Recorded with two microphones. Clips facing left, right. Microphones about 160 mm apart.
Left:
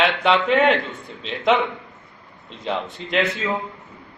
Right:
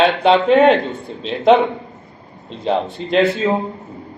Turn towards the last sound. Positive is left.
turn(degrees=-30)  # may be behind; listen again after turning